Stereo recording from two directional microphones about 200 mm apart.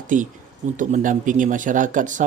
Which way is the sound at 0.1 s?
40° right (ahead or behind).